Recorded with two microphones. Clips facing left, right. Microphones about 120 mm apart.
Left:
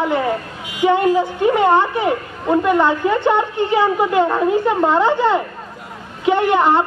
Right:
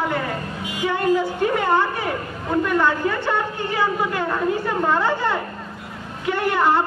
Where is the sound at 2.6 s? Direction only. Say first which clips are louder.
Left 3 dB; 20° left (ahead or behind).